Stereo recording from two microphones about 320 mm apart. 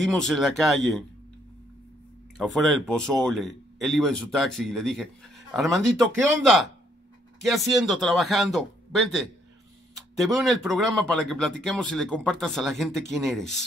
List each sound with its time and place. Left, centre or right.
0.0 s speech: centre
2.3 s speech: centre